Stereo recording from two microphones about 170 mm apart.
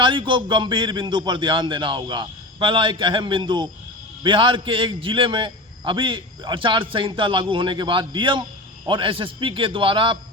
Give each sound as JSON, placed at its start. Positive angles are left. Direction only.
{"t": 0.0, "sound": "a man's voice", "side_deg": -30}